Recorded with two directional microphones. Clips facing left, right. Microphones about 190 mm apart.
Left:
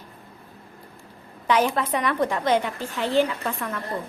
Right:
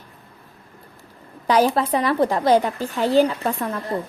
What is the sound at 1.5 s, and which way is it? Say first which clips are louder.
A woman's voice: right 4 dB; 35° right (ahead or behind).